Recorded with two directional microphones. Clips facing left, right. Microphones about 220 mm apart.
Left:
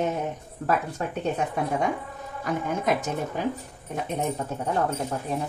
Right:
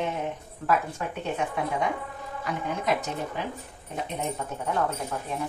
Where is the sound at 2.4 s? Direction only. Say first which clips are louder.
Left 3 dB; 50° left (ahead or behind).